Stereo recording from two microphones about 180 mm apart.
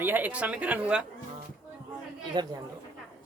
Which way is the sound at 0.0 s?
10° right (ahead or behind).